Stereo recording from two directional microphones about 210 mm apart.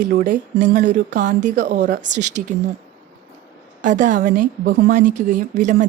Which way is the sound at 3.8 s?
35° right (ahead or behind).